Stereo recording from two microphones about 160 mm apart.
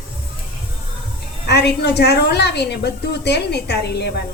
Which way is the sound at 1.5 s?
90° left.